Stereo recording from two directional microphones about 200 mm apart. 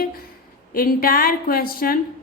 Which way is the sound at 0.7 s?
45° left (ahead or behind).